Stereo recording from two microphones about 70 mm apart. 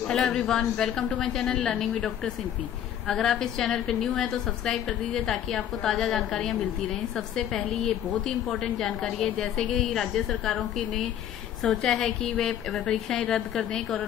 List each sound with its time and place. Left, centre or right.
0.1 s a woman's voice: centre
11.6 s a woman's voice: centre